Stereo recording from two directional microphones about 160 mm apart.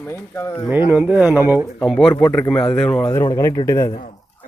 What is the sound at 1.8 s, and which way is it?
Speech, centre (ahead or behind).